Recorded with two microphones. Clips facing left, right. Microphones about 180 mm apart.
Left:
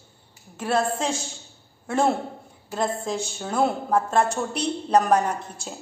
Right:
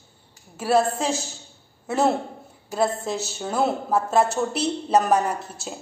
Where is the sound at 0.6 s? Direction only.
10° right (ahead or behind).